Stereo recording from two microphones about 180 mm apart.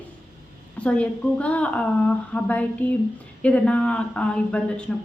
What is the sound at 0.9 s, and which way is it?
A woman's voice, 5° left (ahead or behind).